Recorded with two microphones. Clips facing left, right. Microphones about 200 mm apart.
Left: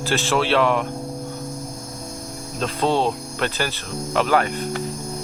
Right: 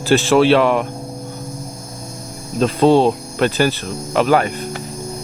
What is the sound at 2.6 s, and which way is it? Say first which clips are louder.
Speech: right 8 dB; 10° right (ahead or behind).